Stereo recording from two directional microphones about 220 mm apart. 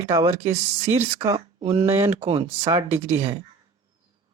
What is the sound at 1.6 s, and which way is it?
Speech, 25° right (ahead or behind).